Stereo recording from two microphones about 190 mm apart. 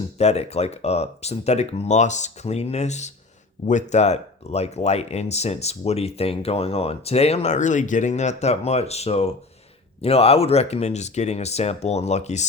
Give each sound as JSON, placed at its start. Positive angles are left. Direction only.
{"t": 0.2, "sound": "speech", "side_deg": 35}